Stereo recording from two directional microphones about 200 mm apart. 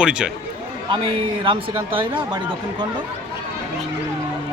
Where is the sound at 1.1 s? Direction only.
25° right (ahead or behind).